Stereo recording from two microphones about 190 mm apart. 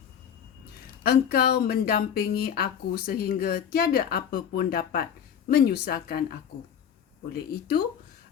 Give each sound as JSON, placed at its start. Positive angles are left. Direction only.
{"t": 1.0, "sound": "speech", "side_deg": 55}
{"t": 7.3, "sound": "speech", "side_deg": 50}